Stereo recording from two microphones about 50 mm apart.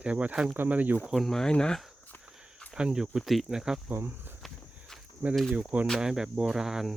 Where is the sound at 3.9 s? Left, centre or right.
Right.